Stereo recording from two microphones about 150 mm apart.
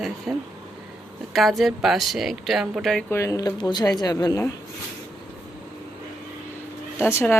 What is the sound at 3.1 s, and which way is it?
Speech, 20° left (ahead or behind).